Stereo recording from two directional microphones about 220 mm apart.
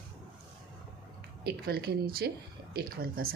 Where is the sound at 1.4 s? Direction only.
45° right (ahead or behind).